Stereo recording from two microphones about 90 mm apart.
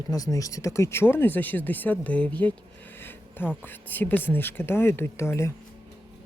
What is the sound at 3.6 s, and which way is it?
Speech, 20° left (ahead or behind).